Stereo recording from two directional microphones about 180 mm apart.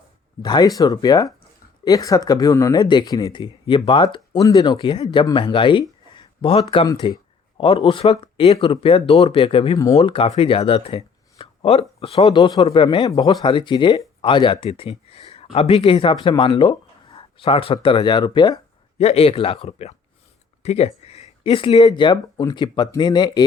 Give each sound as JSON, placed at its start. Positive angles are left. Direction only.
{"t": 0.4, "sound": "speech", "side_deg": 25}
{"t": 10.0, "sound": "speech", "side_deg": 30}
{"t": 18.9, "sound": "a man's voice", "side_deg": 35}